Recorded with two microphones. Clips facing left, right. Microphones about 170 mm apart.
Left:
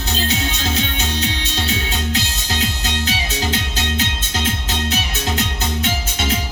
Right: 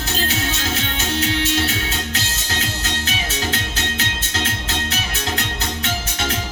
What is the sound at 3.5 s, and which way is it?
Music, 20° left (ahead or behind).